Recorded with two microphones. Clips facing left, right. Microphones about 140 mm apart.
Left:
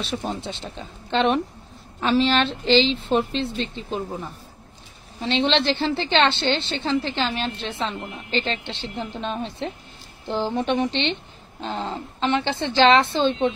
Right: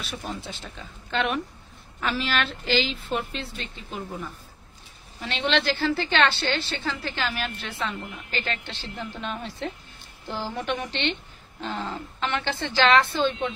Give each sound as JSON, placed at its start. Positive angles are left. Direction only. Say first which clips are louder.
{"t": 0.0, "sound": "a woman's voice", "louder": "left 6 dB", "side_deg": 25}